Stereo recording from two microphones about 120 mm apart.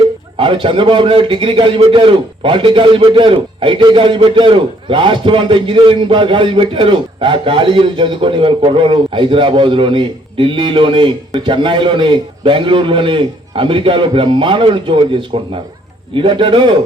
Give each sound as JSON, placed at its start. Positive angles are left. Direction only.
{"t": 0.3, "sound": "a man's voice", "side_deg": -45}